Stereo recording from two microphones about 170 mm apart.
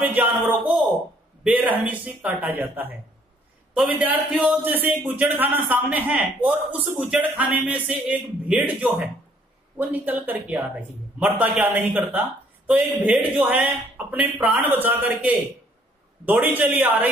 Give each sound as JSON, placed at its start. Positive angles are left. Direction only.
{"t": 0.0, "sound": "a man's voice", "side_deg": -10}